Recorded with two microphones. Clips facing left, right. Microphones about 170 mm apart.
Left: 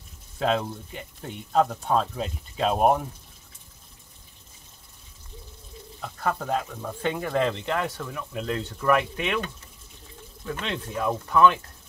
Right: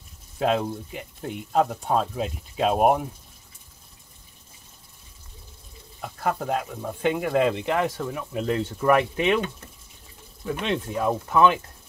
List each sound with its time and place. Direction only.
0.4 s speech: 10° right (ahead or behind)
5.9 s speech: 10° right (ahead or behind)
8.0 s speech: 25° right (ahead or behind)
10.4 s speech: 20° right (ahead or behind)